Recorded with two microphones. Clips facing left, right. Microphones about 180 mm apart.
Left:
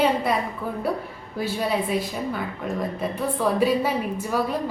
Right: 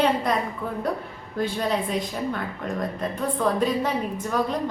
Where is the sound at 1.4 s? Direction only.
5° left (ahead or behind).